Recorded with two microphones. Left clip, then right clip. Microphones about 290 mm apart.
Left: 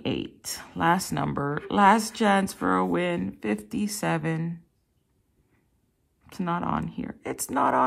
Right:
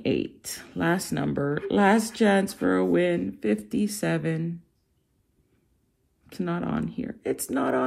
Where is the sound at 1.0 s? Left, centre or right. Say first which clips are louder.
Right 1 dB; left.